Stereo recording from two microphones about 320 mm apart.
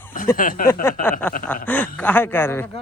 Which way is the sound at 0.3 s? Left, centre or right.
Left.